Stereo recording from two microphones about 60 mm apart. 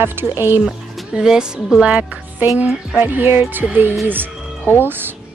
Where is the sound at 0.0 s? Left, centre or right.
Right.